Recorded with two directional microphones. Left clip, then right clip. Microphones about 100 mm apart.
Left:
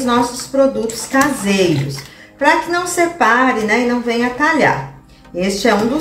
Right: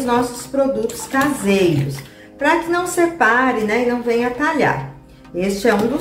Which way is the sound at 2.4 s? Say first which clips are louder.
Left 3 dB; 25° right (ahead or behind).